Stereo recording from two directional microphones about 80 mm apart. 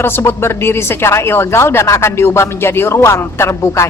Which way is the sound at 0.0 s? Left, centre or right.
Left.